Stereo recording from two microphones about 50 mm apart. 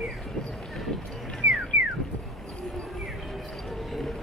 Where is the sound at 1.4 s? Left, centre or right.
Right.